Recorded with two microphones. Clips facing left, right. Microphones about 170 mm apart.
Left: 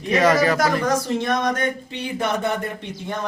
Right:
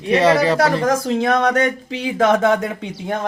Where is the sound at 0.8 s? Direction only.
80° right.